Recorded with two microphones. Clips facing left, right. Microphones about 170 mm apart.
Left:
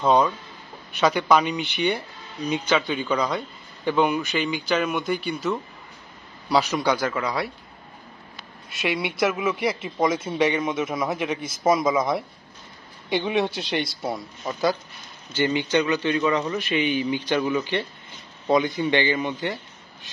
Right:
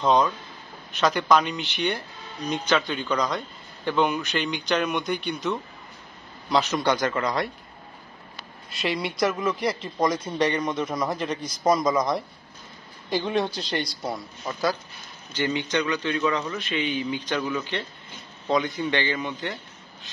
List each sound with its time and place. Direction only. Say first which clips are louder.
0.0 s a man's voice: left 1 dB; 10° left (ahead or behind)
1.6 s speech: left 3 dB; 55° left (ahead or behind)
1.9 s a man's voice: left 3 dB; 10° left (ahead or behind)
8.6 s a man's voice: left 1 dB; centre (ahead or behind)